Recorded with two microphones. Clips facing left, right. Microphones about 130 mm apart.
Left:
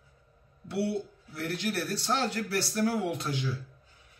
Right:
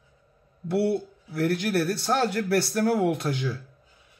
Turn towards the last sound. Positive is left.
turn(degrees=-55)  # may be behind; listen again after turning